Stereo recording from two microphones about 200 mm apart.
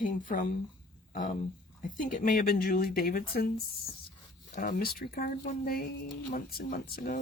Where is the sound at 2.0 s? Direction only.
40° left (ahead or behind).